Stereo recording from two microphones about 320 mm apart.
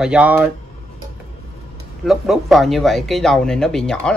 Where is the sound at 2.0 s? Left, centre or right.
Centre.